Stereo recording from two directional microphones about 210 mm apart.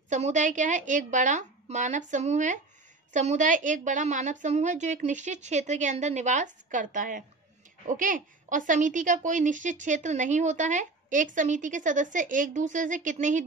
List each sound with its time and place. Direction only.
0.1 s a woman's voice: 35° right (ahead or behind)